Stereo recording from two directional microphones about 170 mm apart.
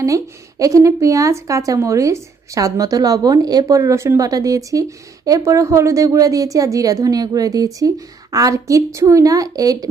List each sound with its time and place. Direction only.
0.6 s speech: 20° right (ahead or behind)